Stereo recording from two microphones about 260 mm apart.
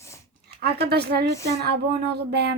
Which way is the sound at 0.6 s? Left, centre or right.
Right.